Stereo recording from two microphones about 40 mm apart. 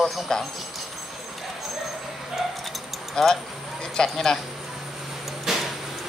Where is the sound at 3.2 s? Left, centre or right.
Centre.